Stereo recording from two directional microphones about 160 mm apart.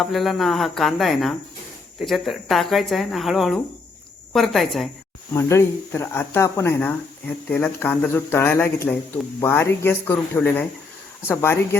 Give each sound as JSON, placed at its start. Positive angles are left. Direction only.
{"t": 0.0, "sound": "speech", "side_deg": 0}
{"t": 5.3, "sound": "speech", "side_deg": 15}